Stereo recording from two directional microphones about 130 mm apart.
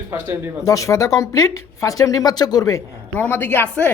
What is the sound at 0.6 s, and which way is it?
Speech, 25° left (ahead or behind).